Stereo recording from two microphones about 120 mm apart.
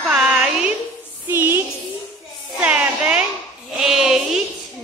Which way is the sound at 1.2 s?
20° right (ahead or behind).